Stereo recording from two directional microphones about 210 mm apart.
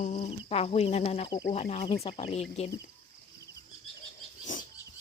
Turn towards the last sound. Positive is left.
turn(degrees=40)  # may be behind; listen again after turning